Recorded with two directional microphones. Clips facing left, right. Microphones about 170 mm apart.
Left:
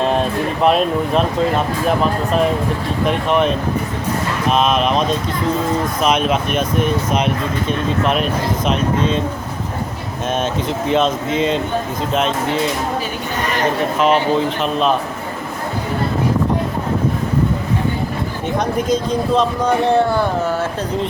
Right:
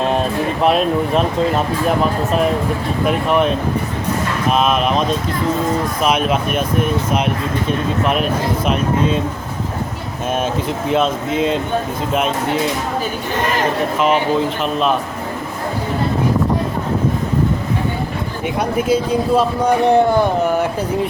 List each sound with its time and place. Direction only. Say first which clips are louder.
0.6 s speech: even; centre (ahead or behind)
3.1 s speech: right 1 dB; centre (ahead or behind)
4.5 s speech: left 1 dB; 5° right (ahead or behind)
10.7 s speech: left 2 dB; 5° right (ahead or behind)
14.0 s speech: left 1 dB; centre (ahead or behind)
18.8 s speech: right 4 dB; 5° right (ahead or behind)